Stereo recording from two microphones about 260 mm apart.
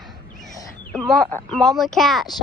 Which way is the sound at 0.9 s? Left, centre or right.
Centre.